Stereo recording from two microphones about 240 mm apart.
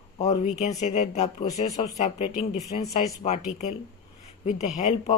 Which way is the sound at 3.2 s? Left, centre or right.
Left.